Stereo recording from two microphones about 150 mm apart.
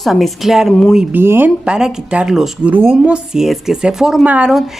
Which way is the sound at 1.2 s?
15° right (ahead or behind).